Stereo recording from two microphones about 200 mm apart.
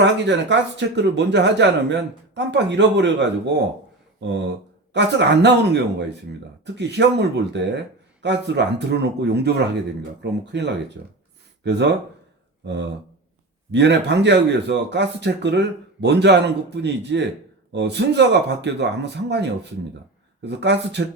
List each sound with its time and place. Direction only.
0.0 s speech: 60° right (ahead or behind)
4.9 s speech: 60° right (ahead or behind)